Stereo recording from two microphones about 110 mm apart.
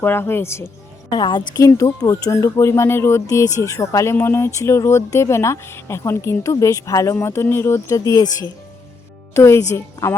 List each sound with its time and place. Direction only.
0.0 s speech: 20° left (ahead or behind)
1.1 s a woman's voice: 40° left (ahead or behind)
1.6 s speech: 30° left (ahead or behind)